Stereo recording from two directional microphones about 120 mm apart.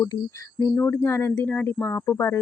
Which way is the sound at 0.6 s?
20° left (ahead or behind).